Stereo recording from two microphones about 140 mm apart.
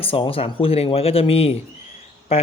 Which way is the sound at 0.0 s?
40° left (ahead or behind).